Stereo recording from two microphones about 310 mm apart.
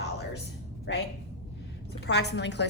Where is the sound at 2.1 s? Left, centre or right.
Left.